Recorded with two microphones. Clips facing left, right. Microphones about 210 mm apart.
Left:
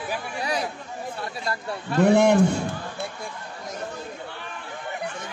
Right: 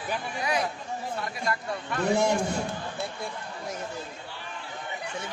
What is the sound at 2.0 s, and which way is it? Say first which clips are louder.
Speech: left 7 dB; 65° left (ahead or behind).